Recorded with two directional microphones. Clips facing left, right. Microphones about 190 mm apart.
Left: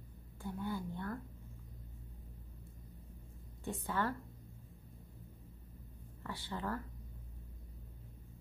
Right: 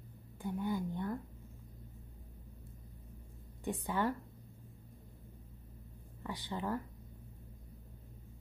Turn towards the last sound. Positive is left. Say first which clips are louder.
# right 3 dB
turn(degrees=-15)  # may be behind; listen again after turning